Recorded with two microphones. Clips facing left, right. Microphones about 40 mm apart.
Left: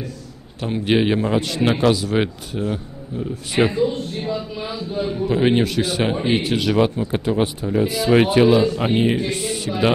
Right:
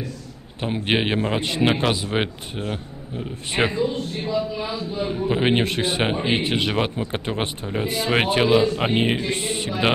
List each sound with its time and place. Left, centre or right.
0.8 s speech: right
4.4 s speech: centre
5.6 s speech: right
8.4 s speech: right